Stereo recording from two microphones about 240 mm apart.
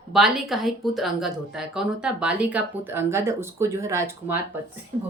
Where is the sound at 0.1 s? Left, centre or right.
Centre.